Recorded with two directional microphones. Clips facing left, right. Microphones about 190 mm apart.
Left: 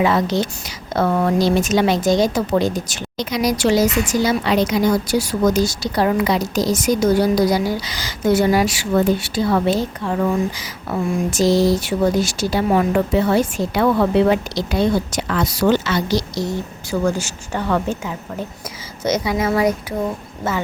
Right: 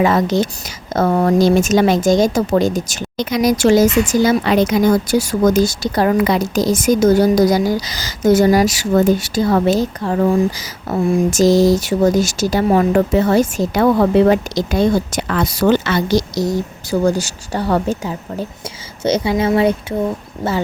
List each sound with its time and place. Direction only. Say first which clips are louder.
0.0 s speech: right 3 dB; 45° right (ahead or behind); by 19.7 s 30° right (ahead or behind)